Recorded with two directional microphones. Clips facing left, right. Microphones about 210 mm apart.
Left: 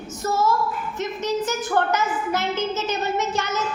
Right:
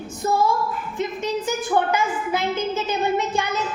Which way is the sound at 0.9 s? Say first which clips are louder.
Even; 15° right (ahead or behind).